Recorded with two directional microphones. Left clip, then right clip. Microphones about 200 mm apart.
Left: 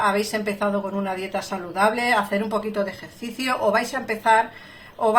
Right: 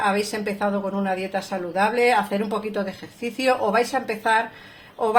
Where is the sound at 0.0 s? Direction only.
40° right (ahead or behind).